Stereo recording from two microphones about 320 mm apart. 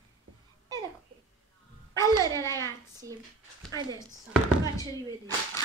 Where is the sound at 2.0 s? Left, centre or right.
Centre.